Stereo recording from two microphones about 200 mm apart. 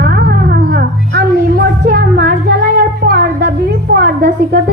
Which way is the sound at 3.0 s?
45° right (ahead or behind).